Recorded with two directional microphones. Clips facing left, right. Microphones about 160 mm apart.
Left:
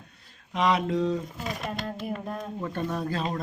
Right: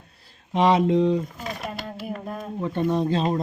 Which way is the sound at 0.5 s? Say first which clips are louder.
Right 6 dB; 30° right (ahead or behind).